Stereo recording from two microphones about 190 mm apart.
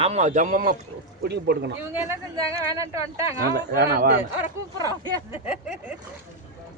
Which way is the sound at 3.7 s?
55° right (ahead or behind).